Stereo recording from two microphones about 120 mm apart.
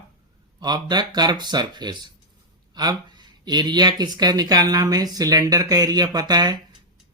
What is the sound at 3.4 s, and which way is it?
Speech, 35° right (ahead or behind).